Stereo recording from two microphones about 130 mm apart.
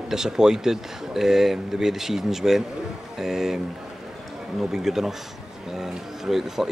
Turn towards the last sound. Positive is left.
turn(degrees=-5)  # may be behind; listen again after turning